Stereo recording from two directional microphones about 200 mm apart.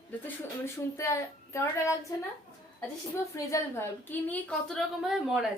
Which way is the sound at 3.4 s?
15° left (ahead or behind).